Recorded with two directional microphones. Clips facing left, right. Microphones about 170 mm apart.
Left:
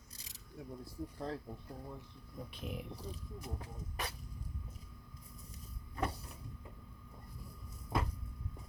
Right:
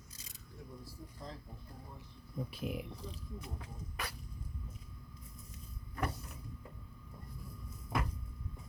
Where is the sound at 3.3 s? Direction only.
40° left (ahead or behind).